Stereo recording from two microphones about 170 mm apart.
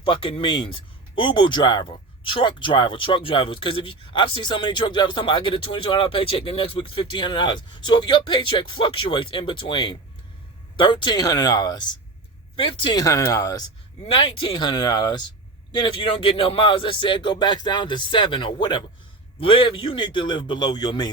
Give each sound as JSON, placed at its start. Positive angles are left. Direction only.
{"t": 0.0, "sound": "speech", "side_deg": 30}